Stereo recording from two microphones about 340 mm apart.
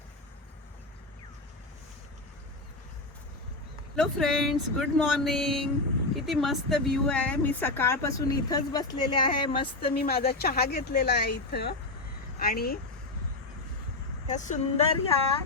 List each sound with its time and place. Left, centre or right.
3.9 s speech: centre
9.9 s speech: left
14.3 s speech: left